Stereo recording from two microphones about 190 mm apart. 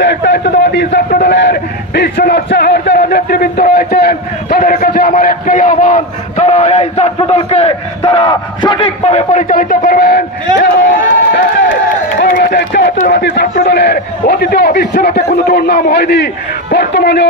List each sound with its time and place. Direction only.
0.0 s a man's voice: 65° left (ahead or behind)
10.6 s a sound: 70° left (ahead or behind)
12.3 s music: 45° left (ahead or behind)
12.5 s a sound: 65° left (ahead or behind)
12.9 s music: 45° left (ahead or behind)
13.2 s a man's voice: 60° left (ahead or behind)